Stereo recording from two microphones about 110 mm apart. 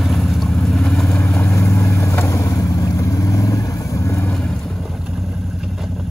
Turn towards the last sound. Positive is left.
turn(degrees=25)  # may be behind; listen again after turning